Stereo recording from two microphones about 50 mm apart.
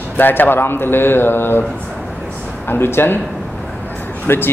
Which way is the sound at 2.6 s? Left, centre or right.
Left.